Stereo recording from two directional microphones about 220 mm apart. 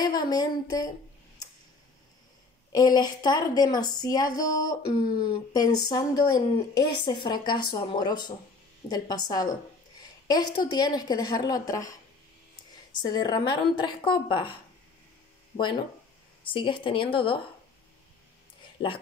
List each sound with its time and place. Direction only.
0.0 s a woman's voice: 20° left (ahead or behind)
2.7 s a woman's voice: 20° left (ahead or behind)
13.0 s speech: 20° left (ahead or behind)
16.4 s speech: 20° left (ahead or behind)